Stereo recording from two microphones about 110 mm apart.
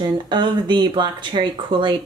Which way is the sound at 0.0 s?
40° right (ahead or behind).